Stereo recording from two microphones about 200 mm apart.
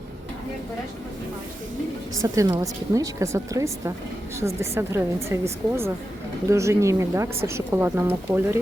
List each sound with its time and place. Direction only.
2.2 s speech: 15° right (ahead or behind)